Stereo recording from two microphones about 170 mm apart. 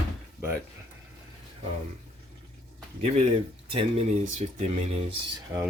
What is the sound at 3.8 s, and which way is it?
Speech, 35° right (ahead or behind).